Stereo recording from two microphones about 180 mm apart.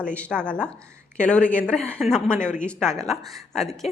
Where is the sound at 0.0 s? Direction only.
5° left (ahead or behind).